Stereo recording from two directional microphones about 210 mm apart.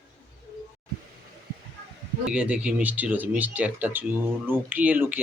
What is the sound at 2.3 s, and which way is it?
Speech, 5° right (ahead or behind).